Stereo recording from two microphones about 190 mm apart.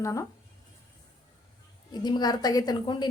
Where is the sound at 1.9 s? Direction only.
20° left (ahead or behind).